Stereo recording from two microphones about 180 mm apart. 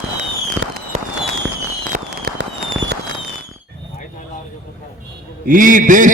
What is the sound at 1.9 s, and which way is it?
Fireworks, 55° right (ahead or behind).